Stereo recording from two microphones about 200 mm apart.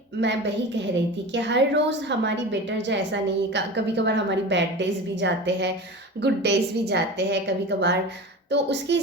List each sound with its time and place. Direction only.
0.2 s a woman's voice: 60° right (ahead or behind)